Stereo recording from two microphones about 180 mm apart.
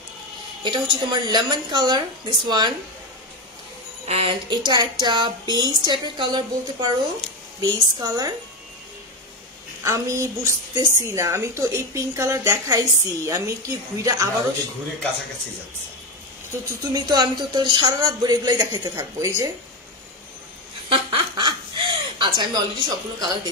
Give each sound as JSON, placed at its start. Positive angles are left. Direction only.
{"t": 0.7, "sound": "speech", "side_deg": -25}
{"t": 4.1, "sound": "speech", "side_deg": -30}
{"t": 9.8, "sound": "a woman's voice", "side_deg": -15}
{"t": 16.8, "sound": "speech", "side_deg": -20}
{"t": 20.9, "sound": "a sound", "side_deg": -25}